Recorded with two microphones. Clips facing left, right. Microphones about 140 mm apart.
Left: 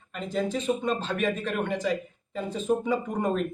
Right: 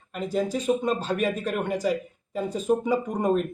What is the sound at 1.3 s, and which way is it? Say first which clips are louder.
Speech: right 1 dB; 10° right (ahead or behind).